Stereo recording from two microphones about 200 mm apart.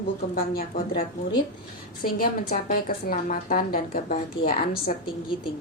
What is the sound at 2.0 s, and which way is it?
A woman's voice, 45° left (ahead or behind).